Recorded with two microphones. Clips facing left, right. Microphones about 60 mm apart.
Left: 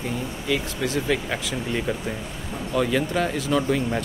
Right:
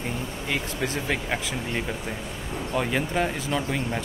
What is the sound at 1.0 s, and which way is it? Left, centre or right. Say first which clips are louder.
Speech: left 2 dB; centre.